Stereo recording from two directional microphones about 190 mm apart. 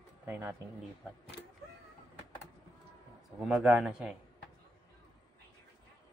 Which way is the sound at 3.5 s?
5° right (ahead or behind).